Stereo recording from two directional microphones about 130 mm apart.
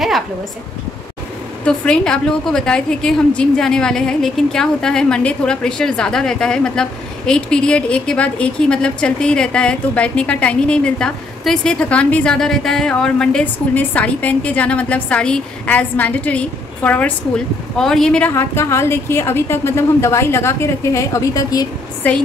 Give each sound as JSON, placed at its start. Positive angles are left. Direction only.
{"t": 1.7, "sound": "a woman's voice", "side_deg": 5}
{"t": 18.3, "sound": "a woman's voice", "side_deg": 20}
{"t": 22.0, "sound": "a woman's voice", "side_deg": 10}